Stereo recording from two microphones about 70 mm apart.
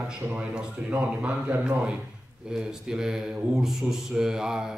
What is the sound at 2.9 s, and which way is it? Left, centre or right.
A man's voice, centre.